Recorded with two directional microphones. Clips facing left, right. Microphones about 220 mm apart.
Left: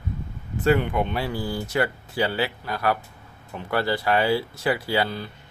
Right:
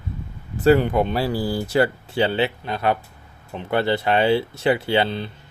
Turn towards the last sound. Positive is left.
turn(degrees=-25)  # may be behind; listen again after turning